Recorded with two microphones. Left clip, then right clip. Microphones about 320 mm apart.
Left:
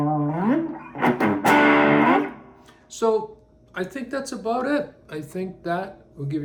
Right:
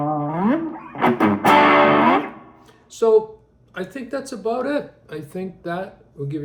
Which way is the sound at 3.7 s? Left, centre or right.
Centre.